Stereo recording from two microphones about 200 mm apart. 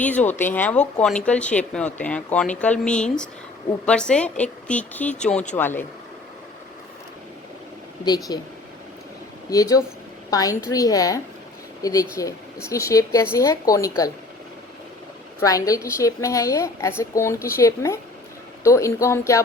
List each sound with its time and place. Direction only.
0.0 s a woman's voice: 10° left (ahead or behind)
8.0 s speech: 20° left (ahead or behind)
9.5 s a woman's voice: 15° left (ahead or behind)
15.4 s a woman's voice: 15° left (ahead or behind)